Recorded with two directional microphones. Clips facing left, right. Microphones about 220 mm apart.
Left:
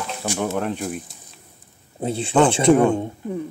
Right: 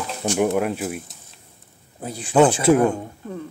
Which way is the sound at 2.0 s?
25° left (ahead or behind).